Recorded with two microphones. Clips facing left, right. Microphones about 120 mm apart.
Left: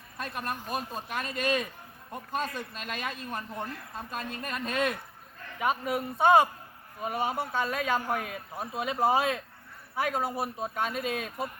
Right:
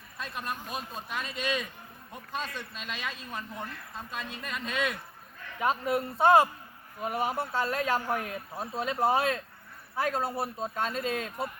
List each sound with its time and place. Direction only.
0.2 s speech: 50° left (ahead or behind)
5.5 s speech: 10° left (ahead or behind)